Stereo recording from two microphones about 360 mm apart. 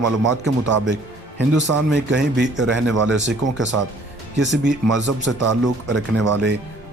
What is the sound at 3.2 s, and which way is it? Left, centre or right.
Speech, right.